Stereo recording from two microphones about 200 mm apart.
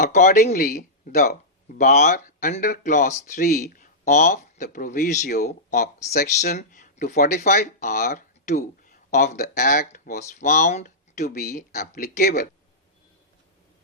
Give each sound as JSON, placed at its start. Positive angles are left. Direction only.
{"t": 0.0, "sound": "speech", "side_deg": 40}
{"t": 1.8, "sound": "speech", "side_deg": 35}
{"t": 9.3, "sound": "speech", "side_deg": 50}